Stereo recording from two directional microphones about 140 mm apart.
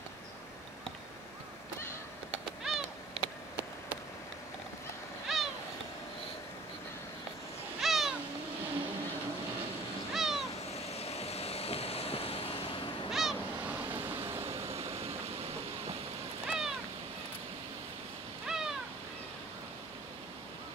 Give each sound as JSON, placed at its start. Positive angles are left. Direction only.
{"t": 2.6, "sound": "bird", "side_deg": 0}
{"t": 5.3, "sound": "a sound", "side_deg": 0}
{"t": 7.8, "sound": "a sound", "side_deg": 0}
{"t": 10.1, "sound": "cat", "side_deg": 0}
{"t": 10.7, "sound": "vehicle", "side_deg": 45}
{"t": 13.1, "sound": "waves", "side_deg": 0}
{"t": 13.7, "sound": "vehicle", "side_deg": -15}
{"t": 14.4, "sound": "vehicle", "side_deg": -45}
{"t": 16.4, "sound": "cat", "side_deg": -5}
{"t": 18.5, "sound": "owl", "side_deg": -5}